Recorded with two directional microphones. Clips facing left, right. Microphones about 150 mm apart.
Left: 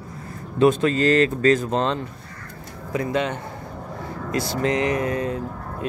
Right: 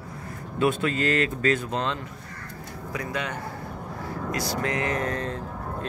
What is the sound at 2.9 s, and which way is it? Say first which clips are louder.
Speech: left 8 dB; 25° left (ahead or behind).